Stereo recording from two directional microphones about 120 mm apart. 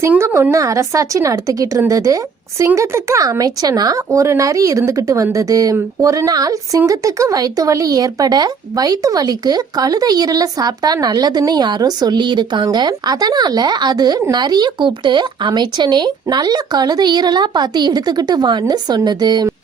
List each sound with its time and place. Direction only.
0.1 s a woman's voice: 20° right (ahead or behind); by 19.5 s 35° right (ahead or behind)